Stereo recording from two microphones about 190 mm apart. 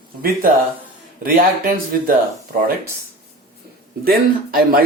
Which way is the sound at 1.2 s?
50° right (ahead or behind).